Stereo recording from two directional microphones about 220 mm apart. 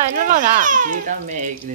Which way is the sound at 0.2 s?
35° right (ahead or behind).